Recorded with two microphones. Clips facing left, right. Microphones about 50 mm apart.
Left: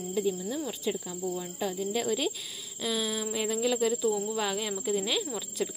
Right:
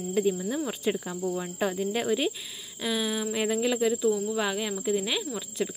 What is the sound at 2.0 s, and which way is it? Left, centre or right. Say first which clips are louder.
Speech: right 3 dB; right.